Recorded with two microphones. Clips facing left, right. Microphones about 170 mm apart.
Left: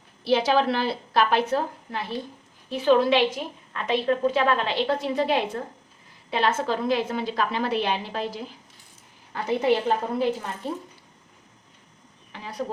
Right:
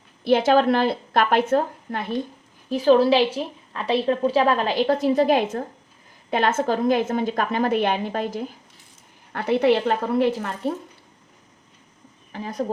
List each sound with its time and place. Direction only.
0.3 s a woman's voice: 50° right (ahead or behind)
2.6 s a woman's voice: 40° right (ahead or behind)
9.3 s a woman's voice: 65° right (ahead or behind)
12.3 s speech: 45° right (ahead or behind)